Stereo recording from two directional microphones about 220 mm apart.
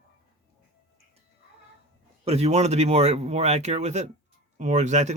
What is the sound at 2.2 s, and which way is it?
Speech, 30° right (ahead or behind).